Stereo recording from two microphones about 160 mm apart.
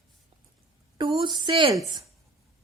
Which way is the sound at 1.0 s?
30° right (ahead or behind).